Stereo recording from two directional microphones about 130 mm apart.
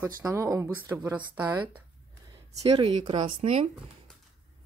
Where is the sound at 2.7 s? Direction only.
40° right (ahead or behind).